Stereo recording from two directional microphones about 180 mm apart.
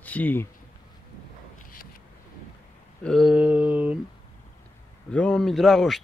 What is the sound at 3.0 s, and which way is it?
Mantra, centre (ahead or behind).